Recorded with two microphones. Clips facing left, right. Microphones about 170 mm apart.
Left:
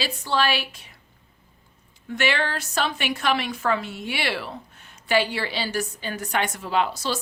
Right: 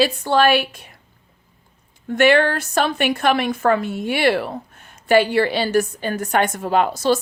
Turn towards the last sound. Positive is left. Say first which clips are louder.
# right 7 dB
turn(degrees=-50)  # may be behind; listen again after turning